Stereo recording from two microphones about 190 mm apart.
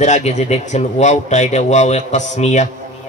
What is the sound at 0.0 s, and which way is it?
A man's voice, 40° left (ahead or behind).